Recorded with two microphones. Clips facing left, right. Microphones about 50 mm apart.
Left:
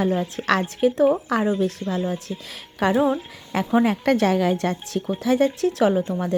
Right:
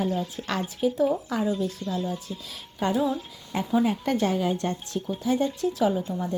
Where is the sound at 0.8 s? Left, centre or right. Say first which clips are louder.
Left 4 dB; left.